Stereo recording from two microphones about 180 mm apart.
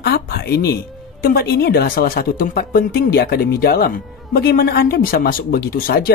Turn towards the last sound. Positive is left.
turn(degrees=55)  # may be behind; listen again after turning